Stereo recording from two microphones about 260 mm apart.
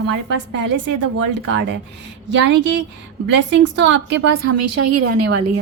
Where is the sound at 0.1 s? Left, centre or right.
Right.